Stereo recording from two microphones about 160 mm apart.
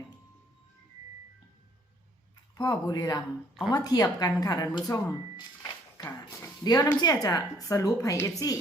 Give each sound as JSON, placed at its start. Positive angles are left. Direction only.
{"t": 2.6, "sound": "a woman's voice", "side_deg": 25}
{"t": 5.4, "sound": "a sound", "side_deg": 25}
{"t": 6.7, "sound": "a woman's voice", "side_deg": 25}